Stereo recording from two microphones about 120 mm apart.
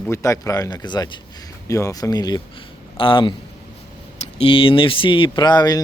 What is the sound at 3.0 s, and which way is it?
Speech, 45° left (ahead or behind).